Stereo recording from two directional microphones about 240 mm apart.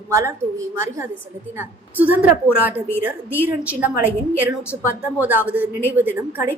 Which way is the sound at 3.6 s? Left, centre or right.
Centre.